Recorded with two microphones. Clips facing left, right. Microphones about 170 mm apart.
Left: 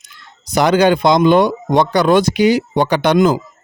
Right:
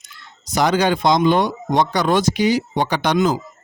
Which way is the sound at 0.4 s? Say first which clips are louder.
Left 5 dB; 65° left (ahead or behind).